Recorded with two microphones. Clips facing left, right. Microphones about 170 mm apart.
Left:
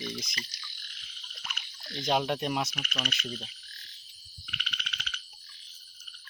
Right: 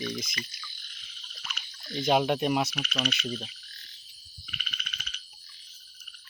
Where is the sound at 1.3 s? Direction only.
10° left (ahead or behind).